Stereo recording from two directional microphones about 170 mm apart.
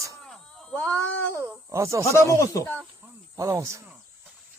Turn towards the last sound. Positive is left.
turn(degrees=-15)  # may be behind; listen again after turning